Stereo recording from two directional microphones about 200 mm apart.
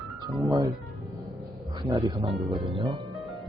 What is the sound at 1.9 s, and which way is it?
Speech, 20° right (ahead or behind).